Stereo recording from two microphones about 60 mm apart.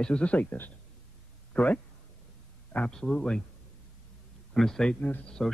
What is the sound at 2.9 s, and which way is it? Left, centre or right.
Speech, centre.